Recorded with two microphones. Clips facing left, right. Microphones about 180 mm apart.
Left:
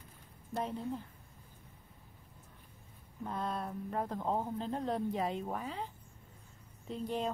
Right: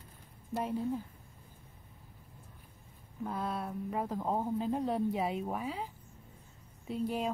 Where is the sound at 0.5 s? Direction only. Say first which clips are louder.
Right 3 dB; 5° right (ahead or behind).